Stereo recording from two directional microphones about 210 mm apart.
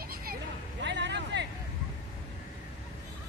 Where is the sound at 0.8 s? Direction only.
55° right (ahead or behind).